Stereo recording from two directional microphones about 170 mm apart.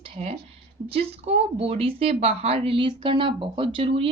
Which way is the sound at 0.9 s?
35° right (ahead or behind).